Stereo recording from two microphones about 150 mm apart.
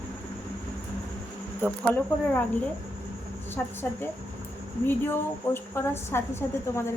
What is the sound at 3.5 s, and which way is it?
A woman's voice, 15° left (ahead or behind).